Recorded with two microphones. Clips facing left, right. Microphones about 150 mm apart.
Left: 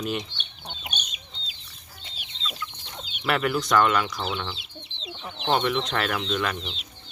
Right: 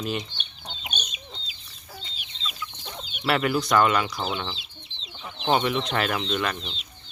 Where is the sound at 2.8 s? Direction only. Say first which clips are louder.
Right 2 dB; 50° right (ahead or behind).